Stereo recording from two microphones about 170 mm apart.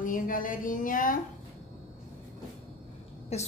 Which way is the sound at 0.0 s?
55° left (ahead or behind).